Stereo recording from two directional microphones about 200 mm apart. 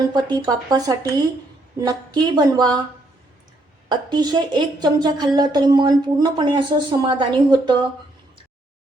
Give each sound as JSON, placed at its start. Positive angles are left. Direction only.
{"t": 0.0, "sound": "a woman's voice", "side_deg": -20}
{"t": 3.8, "sound": "a woman's voice", "side_deg": -20}